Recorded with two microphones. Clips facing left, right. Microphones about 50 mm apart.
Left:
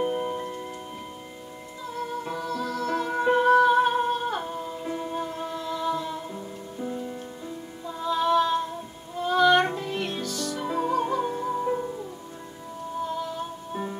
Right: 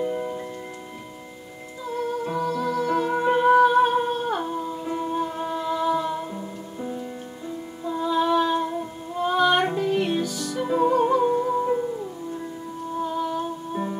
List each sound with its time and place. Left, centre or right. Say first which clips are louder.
0.0 s music: even; left
2.2 s music: right 5 dB; centre
3.6 s humming: right 2 dB; centre
4.8 s music: right 4 dB; centre
7.8 s female singing: right 3 dB; centre
9.2 s music: even; centre
13.4 s music: right 4 dB; centre